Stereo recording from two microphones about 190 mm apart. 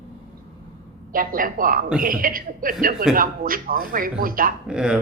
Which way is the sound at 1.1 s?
45° right (ahead or behind).